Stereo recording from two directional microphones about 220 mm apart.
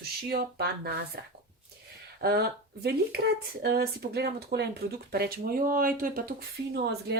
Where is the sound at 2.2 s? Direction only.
45° right (ahead or behind).